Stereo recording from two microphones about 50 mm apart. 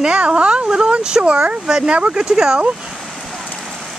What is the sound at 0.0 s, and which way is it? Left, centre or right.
Speech, right.